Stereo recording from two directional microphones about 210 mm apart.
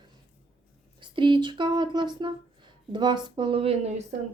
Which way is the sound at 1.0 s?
20° right (ahead or behind).